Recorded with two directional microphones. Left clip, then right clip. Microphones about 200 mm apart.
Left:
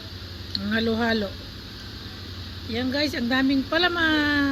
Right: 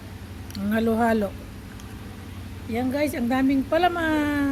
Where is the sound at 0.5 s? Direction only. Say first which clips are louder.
Right 1 dB; 25° right (ahead or behind).